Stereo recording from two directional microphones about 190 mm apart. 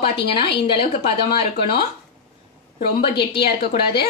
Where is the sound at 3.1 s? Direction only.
25° left (ahead or behind).